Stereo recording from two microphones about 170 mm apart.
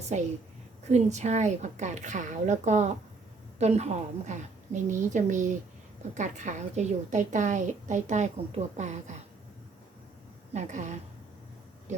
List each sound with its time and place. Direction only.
0.1 s a woman's voice: 45° right (ahead or behind)
10.5 s a woman's voice: 45° right (ahead or behind)